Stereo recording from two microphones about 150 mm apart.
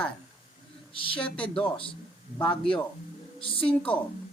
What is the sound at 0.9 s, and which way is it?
Speech, 35° left (ahead or behind).